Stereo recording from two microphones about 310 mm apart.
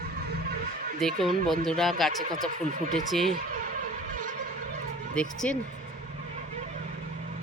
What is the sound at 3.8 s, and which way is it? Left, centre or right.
Music, right.